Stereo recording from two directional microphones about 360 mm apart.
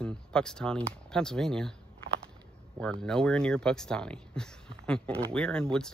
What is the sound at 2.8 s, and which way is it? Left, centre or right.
Speech, centre.